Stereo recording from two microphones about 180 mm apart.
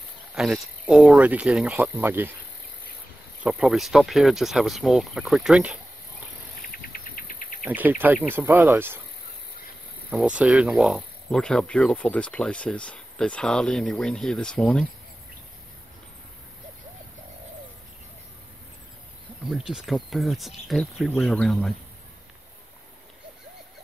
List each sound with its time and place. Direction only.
0.3 s speech: 5° right (ahead or behind)
3.4 s speech: 5° right (ahead or behind)
6.7 s cricket: 55° left (ahead or behind)
7.6 s cricket: 10° right (ahead or behind)
10.1 s speech: 5° right (ahead or behind)
19.4 s speech: 5° right (ahead or behind)